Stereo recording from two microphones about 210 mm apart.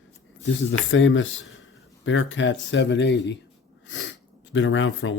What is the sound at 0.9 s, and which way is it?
Speech, 65° left (ahead or behind).